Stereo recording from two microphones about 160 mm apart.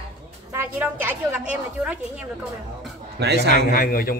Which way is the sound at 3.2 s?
90° right.